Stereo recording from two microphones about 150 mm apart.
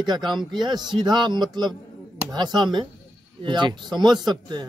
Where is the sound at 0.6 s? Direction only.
30° right (ahead or behind).